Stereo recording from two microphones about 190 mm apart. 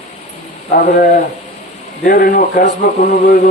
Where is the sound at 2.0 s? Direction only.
45° left (ahead or behind).